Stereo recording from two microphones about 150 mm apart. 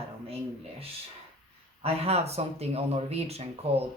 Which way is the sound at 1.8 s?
45° right (ahead or behind).